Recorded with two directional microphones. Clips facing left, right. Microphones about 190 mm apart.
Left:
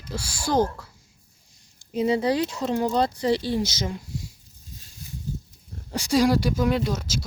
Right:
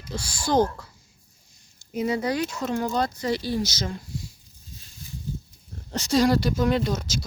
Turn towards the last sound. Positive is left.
turn(degrees=5)  # may be behind; listen again after turning